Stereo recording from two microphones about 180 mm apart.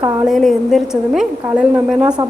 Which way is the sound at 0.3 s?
Centre (ahead or behind).